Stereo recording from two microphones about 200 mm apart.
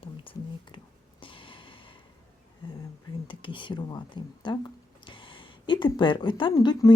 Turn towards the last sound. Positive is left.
turn(degrees=20)  # may be behind; listen again after turning